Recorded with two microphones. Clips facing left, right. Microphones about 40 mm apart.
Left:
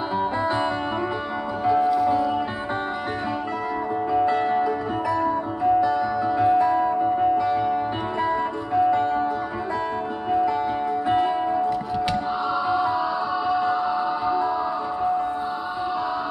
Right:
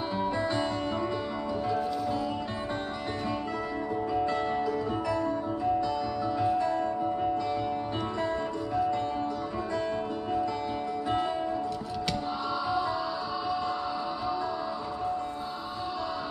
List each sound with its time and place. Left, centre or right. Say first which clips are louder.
1.7 s music: left 13 dB; centre
4.1 s music: left 9 dB; left
8.7 s music: left 10 dB; left
11.1 s music: left 8 dB; left
12.6 s music: left 7 dB; left